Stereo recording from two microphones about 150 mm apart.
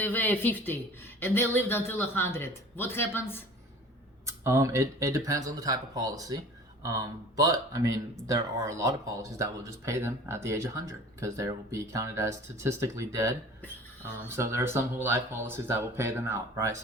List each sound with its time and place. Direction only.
0.0 s speech: 10° left (ahead or behind)
4.3 s speech: 20° right (ahead or behind)